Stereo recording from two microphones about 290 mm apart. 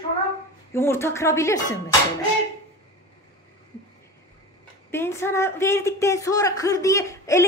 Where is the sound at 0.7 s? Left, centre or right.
Centre.